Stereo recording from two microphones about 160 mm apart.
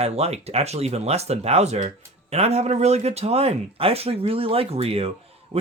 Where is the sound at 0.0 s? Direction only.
40° right (ahead or behind).